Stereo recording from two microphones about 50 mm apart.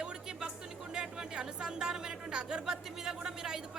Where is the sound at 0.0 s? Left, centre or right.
Centre.